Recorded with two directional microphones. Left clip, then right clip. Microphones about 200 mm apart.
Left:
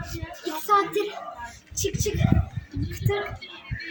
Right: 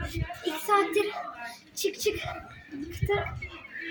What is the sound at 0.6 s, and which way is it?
A woman's voice, 5° right (ahead or behind).